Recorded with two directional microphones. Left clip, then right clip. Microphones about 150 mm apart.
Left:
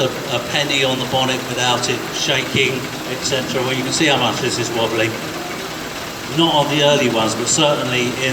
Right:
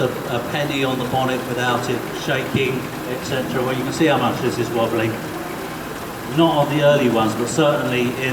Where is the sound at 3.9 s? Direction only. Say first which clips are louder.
Left 2 dB; 40° right (ahead or behind).